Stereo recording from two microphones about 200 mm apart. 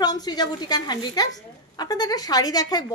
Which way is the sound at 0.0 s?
20° left (ahead or behind).